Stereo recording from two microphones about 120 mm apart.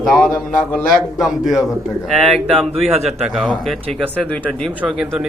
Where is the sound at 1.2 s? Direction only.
5° right (ahead or behind).